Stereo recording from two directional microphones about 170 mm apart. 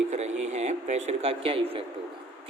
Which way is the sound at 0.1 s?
40° right (ahead or behind).